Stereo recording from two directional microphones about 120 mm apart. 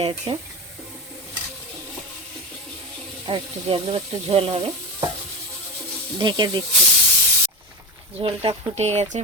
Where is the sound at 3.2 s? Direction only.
50° right (ahead or behind).